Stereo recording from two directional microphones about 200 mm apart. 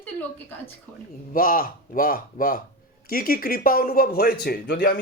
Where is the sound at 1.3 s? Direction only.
45° left (ahead or behind).